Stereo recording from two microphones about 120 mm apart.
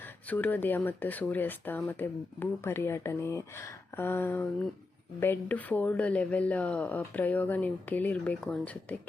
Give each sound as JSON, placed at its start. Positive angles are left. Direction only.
{"t": 0.0, "sound": "speech", "side_deg": 15}